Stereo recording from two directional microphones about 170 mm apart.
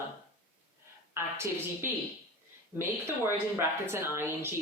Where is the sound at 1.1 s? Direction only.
15° right (ahead or behind).